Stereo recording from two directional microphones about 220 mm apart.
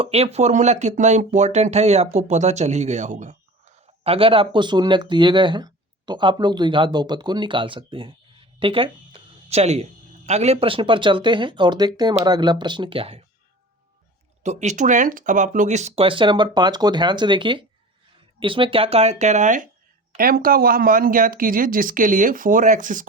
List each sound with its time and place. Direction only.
0.0 s speech: 25° right (ahead or behind)
8.5 s a sound: 25° right (ahead or behind)
10.2 s speech: 30° right (ahead or behind)
14.4 s speech: 30° right (ahead or behind)